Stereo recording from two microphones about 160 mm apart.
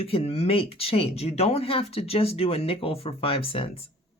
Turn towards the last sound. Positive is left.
turn(degrees=35)  # may be behind; listen again after turning